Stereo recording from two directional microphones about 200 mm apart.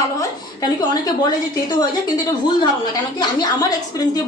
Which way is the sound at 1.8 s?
20° left (ahead or behind).